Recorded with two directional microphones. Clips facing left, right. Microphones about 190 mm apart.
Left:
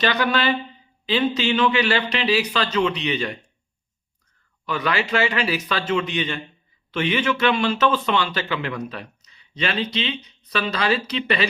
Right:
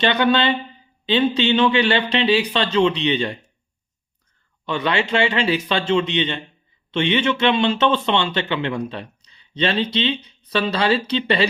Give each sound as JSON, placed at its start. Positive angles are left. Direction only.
{"t": 0.0, "sound": "a man's voice", "side_deg": -25}
{"t": 4.6, "sound": "a man's voice", "side_deg": -25}